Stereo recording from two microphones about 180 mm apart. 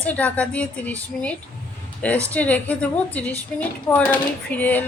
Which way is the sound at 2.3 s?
10° left (ahead or behind).